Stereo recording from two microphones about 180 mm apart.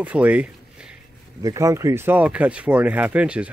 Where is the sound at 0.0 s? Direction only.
10° right (ahead or behind).